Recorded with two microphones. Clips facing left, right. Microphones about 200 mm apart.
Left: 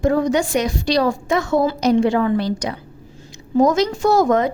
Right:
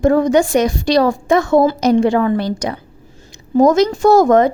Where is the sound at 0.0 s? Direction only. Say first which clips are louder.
Right 5 dB; 50° right (ahead or behind).